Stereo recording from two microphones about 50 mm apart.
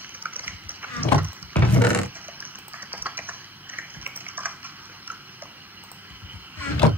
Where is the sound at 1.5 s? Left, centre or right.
Left.